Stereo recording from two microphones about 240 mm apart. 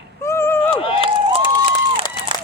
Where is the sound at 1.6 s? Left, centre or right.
Right.